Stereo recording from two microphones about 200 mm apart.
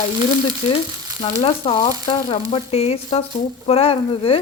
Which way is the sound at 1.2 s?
30° left (ahead or behind).